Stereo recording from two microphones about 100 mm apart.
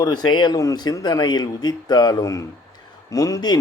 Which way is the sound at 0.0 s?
45° left (ahead or behind).